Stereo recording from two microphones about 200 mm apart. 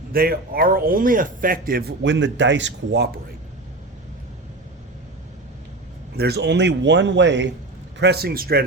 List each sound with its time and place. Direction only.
0.1 s speech: 50° right (ahead or behind)
6.1 s speech: 55° right (ahead or behind)